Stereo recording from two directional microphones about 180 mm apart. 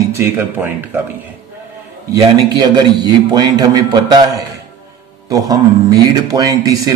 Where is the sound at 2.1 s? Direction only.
25° right (ahead or behind).